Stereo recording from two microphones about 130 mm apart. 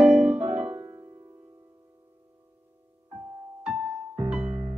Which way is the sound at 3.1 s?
30° right (ahead or behind).